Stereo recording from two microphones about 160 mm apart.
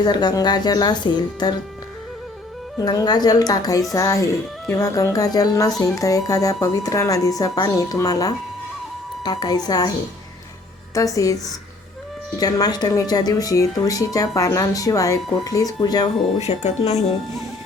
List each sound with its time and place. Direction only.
0.0 s speech: 25° left (ahead or behind)
2.7 s speech: 25° left (ahead or behind)
10.9 s speech: 20° left (ahead or behind)
12.4 s speech: 25° left (ahead or behind)
16.4 s speech: 45° left (ahead or behind)